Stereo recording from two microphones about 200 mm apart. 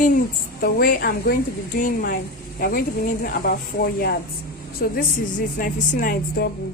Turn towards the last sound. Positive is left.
turn(degrees=45)  # may be behind; listen again after turning